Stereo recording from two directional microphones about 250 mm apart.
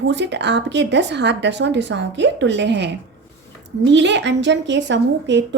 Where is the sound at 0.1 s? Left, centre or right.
Right.